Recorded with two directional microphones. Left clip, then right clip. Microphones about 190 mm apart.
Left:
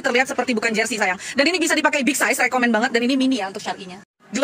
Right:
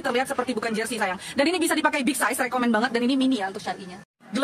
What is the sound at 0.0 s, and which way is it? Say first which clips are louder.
A woman's voice: left 5 dB; 10° left (ahead or behind).